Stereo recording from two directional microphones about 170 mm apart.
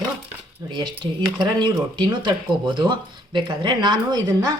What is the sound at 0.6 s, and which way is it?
Speech, 25° right (ahead or behind).